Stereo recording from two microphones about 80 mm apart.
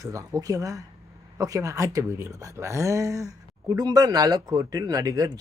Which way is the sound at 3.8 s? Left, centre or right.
Right.